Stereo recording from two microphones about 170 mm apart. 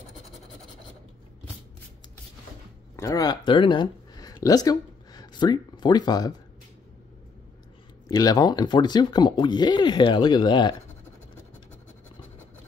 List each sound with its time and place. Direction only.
3.0 s speech: 20° left (ahead or behind)
8.1 s speech: 20° left (ahead or behind)